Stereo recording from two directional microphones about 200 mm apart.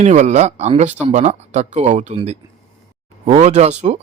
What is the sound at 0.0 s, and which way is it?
Speech, 35° right (ahead or behind).